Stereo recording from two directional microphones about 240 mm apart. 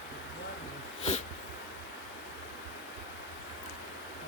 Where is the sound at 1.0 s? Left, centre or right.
Left.